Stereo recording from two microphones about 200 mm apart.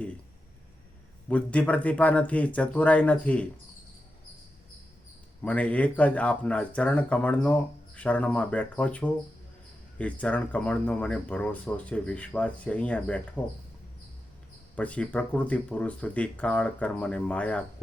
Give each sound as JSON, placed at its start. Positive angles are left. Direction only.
{"t": 1.3, "sound": "speech", "side_deg": 5}
{"t": 5.4, "sound": "speech", "side_deg": 5}
{"t": 14.8, "sound": "speech", "side_deg": 5}